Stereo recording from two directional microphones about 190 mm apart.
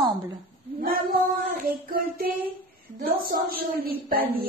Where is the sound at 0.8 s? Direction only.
50° right (ahead or behind).